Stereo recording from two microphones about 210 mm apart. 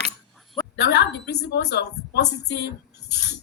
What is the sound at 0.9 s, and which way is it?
Speech, 55° left (ahead or behind).